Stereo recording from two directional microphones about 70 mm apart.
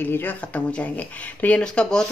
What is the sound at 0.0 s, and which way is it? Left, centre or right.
Speech, left.